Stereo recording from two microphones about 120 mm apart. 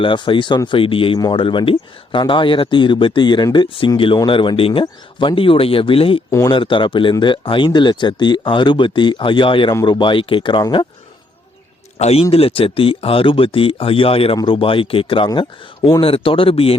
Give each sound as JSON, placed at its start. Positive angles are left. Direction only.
{"t": 0.0, "sound": "speech", "side_deg": 45}
{"t": 11.9, "sound": "speech", "side_deg": 60}